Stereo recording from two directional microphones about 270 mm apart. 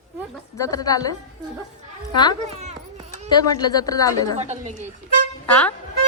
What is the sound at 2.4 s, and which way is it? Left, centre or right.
Children playing, right.